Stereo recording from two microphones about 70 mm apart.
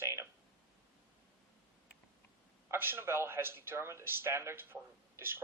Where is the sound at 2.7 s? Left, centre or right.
Right.